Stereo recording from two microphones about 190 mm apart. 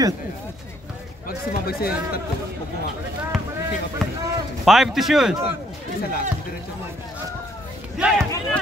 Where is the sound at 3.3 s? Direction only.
Centre (ahead or behind).